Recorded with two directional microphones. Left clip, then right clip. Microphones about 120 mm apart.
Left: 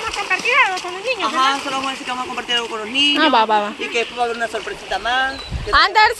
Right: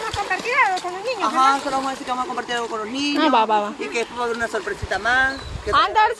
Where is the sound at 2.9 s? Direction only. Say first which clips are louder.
Left 12 dB; 45° right (ahead or behind).